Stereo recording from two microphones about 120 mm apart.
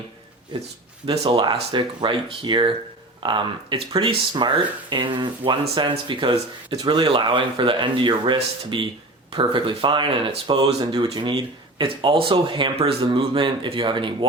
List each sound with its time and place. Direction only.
1.2 s speech: 50° right (ahead or behind)
1.5 s speech: 40° right (ahead or behind)
10.8 s speech: 35° right (ahead or behind)